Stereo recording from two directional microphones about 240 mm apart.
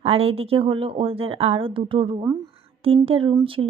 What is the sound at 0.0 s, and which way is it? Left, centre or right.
Speech, right.